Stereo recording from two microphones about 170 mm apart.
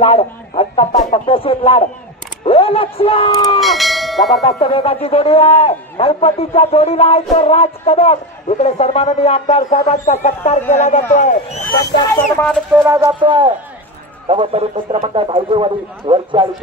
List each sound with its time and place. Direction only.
0.0 s speech: 35° left (ahead or behind)
3.6 s bell: centre (ahead or behind)
4.4 s speech: 35° left (ahead or behind)
12.4 s speech: 5° left (ahead or behind)
12.7 s music: 15° right (ahead or behind)
13.2 s a man's voice: 30° right (ahead or behind)